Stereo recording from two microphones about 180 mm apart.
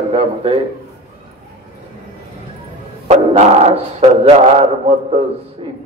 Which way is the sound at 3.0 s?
40° right (ahead or behind).